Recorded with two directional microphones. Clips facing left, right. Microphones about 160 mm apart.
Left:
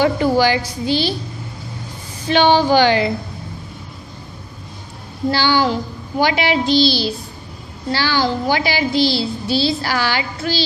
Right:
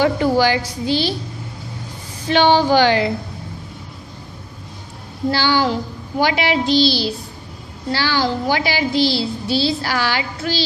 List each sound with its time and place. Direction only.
0.0 s a woman's voice: 15° left (ahead or behind)
2.3 s a woman's voice: 15° left (ahead or behind)
5.3 s a woman's voice: 20° left (ahead or behind)